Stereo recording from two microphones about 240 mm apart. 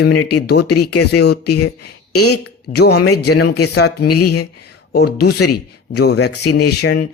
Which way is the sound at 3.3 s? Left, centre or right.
Left.